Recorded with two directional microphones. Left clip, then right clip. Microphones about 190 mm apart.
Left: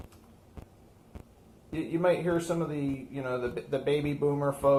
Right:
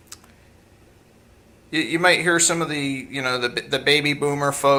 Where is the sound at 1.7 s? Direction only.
15° right (ahead or behind).